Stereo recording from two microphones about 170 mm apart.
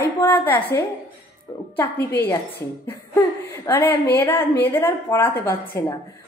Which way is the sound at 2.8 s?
15° left (ahead or behind).